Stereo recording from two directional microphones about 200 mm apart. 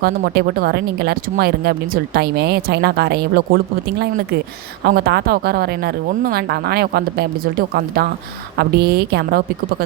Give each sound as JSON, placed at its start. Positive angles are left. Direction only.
{"t": 0.0, "sound": "speech", "side_deg": -50}
{"t": 4.8, "sound": "speech", "side_deg": -50}